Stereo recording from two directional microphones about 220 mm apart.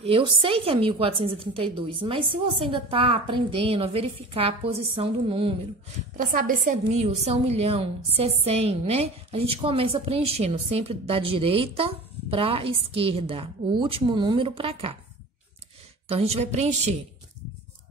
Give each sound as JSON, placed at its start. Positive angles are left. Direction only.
{"t": 0.0, "sound": "a woman's voice", "side_deg": -25}
{"t": 6.1, "sound": "a woman's voice", "side_deg": -40}
{"t": 16.1, "sound": "a woman's voice", "side_deg": -30}